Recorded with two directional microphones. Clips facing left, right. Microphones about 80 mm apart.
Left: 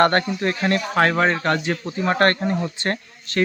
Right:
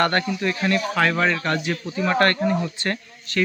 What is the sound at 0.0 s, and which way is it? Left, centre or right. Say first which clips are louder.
Speech: left 3 dB; left.